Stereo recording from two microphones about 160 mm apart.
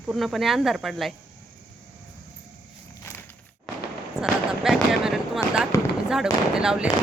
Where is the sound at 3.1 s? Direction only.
20° left (ahead or behind).